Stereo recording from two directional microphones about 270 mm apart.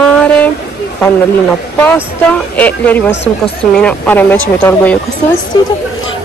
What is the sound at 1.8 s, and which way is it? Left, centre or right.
Speech, centre.